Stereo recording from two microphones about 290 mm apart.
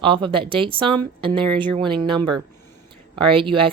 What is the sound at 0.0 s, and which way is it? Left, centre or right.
Speech, centre.